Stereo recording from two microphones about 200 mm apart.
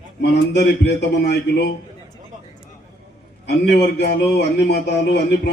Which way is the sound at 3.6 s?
60° left (ahead or behind).